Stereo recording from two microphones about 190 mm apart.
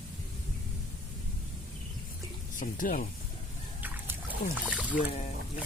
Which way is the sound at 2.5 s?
45° left (ahead or behind).